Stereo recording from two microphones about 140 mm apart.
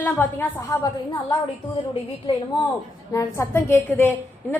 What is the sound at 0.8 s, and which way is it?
Speech, 25° left (ahead or behind).